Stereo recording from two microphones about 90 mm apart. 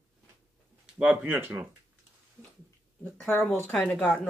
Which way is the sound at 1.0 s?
20° right (ahead or behind).